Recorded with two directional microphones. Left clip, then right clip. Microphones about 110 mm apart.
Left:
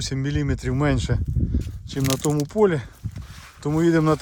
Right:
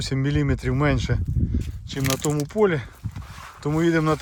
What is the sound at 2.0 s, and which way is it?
Speech, centre (ahead or behind).